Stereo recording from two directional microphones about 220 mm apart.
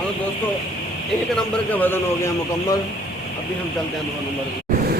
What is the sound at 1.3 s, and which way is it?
A man's voice, 10° left (ahead or behind).